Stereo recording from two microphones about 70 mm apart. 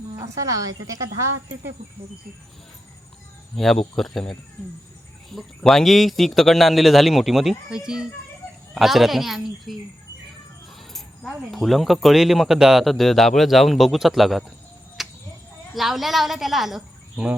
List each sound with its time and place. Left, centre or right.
0.2 s speech: right
3.5 s speech: centre
5.7 s speech: centre
10.9 s speech: centre
15.0 s a sound: centre
15.7 s speech: centre